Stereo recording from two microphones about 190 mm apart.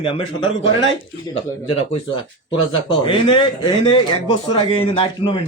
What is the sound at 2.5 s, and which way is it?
A man's voice, 25° left (ahead or behind).